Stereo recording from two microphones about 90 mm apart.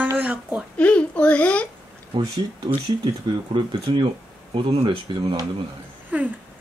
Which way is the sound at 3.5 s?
60° right (ahead or behind).